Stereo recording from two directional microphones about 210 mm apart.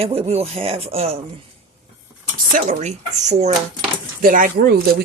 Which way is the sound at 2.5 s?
35° right (ahead or behind).